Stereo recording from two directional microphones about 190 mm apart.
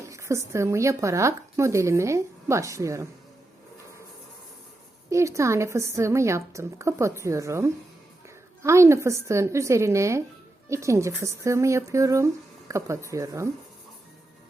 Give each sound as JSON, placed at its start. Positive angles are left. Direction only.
{"t": 0.0, "sound": "speech", "side_deg": -15}
{"t": 5.0, "sound": "speech", "side_deg": -15}